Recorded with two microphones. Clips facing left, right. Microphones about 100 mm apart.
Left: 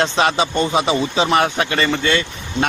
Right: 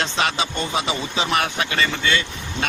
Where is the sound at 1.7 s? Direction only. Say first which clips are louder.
Left 2 dB; 45° left (ahead or behind).